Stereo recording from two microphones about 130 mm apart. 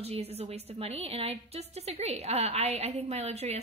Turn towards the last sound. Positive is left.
turn(degrees=-55)  # may be behind; listen again after turning